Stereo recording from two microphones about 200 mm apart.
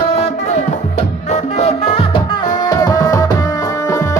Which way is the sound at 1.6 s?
30° left (ahead or behind).